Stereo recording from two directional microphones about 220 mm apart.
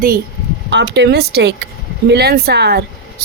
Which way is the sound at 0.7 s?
50° right (ahead or behind).